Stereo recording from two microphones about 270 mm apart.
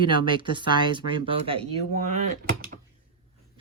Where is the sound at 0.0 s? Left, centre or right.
Centre.